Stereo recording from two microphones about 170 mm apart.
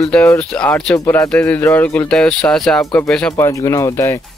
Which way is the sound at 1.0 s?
20° left (ahead or behind).